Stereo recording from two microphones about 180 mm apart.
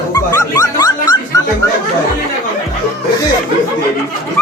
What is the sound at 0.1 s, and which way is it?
Dog, 20° left (ahead or behind).